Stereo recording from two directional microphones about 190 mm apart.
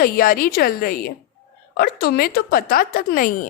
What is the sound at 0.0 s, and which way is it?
A woman's voice, 50° left (ahead or behind).